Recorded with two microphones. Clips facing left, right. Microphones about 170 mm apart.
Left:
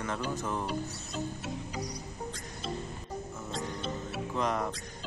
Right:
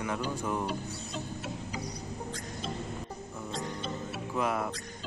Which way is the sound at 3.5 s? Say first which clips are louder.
Left 1 dB; centre (ahead or behind).